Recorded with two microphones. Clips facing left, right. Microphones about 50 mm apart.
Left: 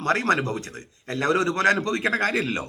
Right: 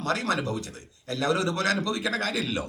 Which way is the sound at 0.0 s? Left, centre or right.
Left.